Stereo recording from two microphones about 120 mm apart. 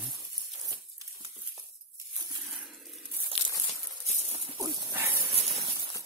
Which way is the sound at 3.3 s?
5° left (ahead or behind).